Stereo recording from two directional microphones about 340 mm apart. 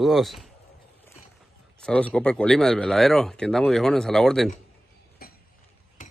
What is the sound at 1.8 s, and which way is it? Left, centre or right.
Speech, centre.